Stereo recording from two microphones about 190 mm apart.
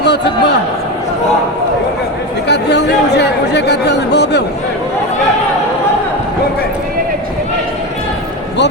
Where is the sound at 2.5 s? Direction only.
65° left (ahead or behind).